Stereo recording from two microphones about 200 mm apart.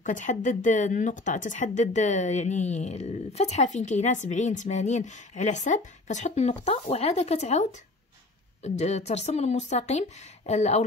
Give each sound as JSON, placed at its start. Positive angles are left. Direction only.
{"t": 0.0, "sound": "speech", "side_deg": 40}
{"t": 8.6, "sound": "speech", "side_deg": 35}